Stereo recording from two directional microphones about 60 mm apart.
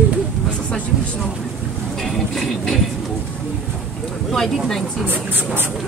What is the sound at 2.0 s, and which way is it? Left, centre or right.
Music, centre.